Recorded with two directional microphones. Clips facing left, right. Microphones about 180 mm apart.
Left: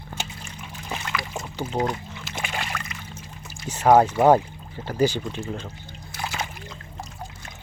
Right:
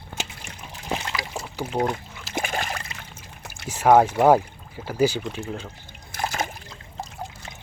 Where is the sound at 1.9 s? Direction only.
35° right (ahead or behind).